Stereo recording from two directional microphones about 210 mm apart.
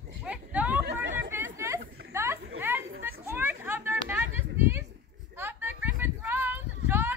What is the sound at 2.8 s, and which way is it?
Children playing, 65° right (ahead or behind).